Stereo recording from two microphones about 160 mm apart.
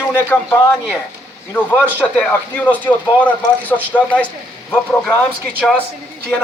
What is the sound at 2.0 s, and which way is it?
A man's voice, 5° left (ahead or behind).